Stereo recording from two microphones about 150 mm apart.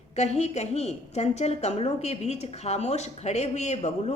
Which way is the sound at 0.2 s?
45° left (ahead or behind).